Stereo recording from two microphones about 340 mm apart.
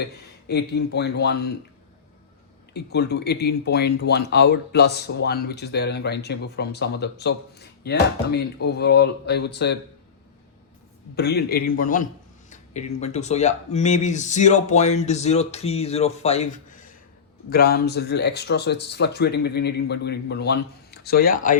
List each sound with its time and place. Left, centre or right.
0.4 s speech: left
2.7 s speech: left
11.1 s speech: left